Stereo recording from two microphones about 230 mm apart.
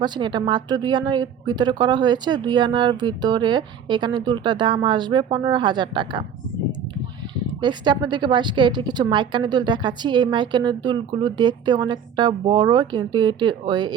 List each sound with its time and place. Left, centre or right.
0.0 s a woman's voice: centre
7.6 s a woman's voice: centre